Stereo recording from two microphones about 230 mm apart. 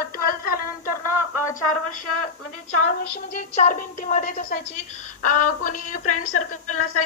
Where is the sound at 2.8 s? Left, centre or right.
Left.